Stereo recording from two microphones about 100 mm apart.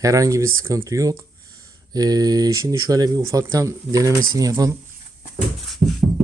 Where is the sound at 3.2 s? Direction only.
25° right (ahead or behind).